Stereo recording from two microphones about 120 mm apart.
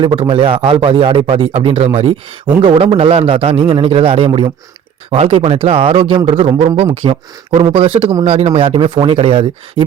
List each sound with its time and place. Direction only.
0.0 s a man's voice: 40° right (ahead or behind)
5.1 s a man's voice: 60° right (ahead or behind)
7.0 s a man's voice: 60° right (ahead or behind)
8.2 s a man's voice: 60° right (ahead or behind)